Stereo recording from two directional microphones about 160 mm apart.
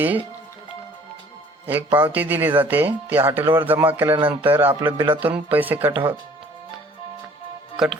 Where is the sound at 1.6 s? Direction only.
10° right (ahead or behind).